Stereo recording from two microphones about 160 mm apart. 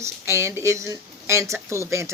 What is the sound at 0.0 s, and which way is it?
Speech, 15° right (ahead or behind).